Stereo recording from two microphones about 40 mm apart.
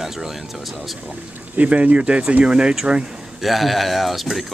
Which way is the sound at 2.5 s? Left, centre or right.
Right.